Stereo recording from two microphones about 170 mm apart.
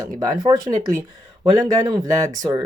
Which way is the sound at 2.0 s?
20° right (ahead or behind).